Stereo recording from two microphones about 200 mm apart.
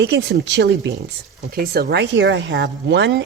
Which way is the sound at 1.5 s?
50° right (ahead or behind).